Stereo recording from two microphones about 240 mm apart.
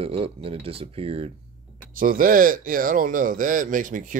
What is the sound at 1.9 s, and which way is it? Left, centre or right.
Speech, right.